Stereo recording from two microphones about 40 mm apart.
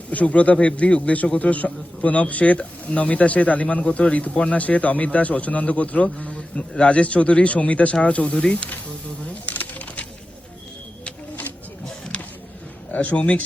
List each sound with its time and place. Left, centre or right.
0.1 s speech: left
8.2 s speech: left
9.5 s typing: left
12.1 s a sound: left
12.9 s speech: left